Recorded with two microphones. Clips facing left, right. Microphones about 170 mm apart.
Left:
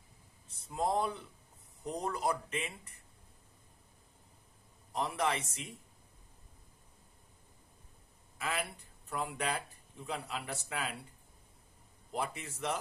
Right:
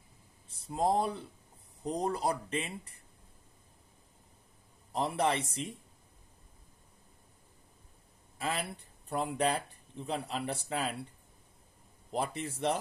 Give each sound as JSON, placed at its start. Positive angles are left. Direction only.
{"t": 0.5, "sound": "speech", "side_deg": -35}
{"t": 4.9, "sound": "speech", "side_deg": -30}
{"t": 8.4, "sound": "speech", "side_deg": -30}
{"t": 12.1, "sound": "speech", "side_deg": -35}